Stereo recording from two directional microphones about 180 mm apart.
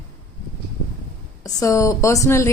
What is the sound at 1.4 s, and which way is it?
Speech, 15° left (ahead or behind).